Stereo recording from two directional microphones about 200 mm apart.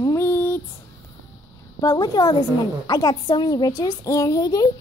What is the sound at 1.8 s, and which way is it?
A woman's voice, 15° left (ahead or behind).